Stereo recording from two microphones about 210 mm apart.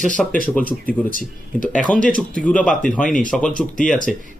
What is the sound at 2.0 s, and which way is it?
Speech, 40° left (ahead or behind).